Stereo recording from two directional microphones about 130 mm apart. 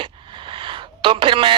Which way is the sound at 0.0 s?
40° right (ahead or behind).